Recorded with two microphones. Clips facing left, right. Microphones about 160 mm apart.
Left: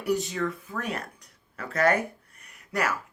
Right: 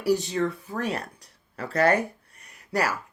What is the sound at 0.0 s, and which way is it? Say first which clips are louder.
Speech: right 3 dB; 35° right (ahead or behind).